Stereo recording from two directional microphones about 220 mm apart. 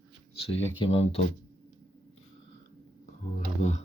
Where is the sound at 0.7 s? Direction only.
25° left (ahead or behind).